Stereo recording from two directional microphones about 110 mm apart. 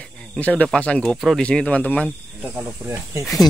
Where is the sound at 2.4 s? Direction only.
10° right (ahead or behind).